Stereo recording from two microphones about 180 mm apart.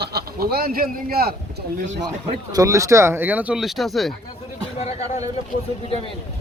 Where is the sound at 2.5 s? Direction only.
20° right (ahead or behind); by 4.1 s centre (ahead or behind).